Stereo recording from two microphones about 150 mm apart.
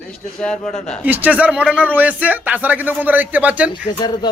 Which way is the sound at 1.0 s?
10° right (ahead or behind).